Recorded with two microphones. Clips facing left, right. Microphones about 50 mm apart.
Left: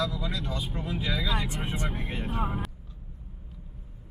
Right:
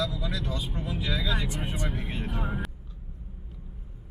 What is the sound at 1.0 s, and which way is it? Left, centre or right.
Speech, centre.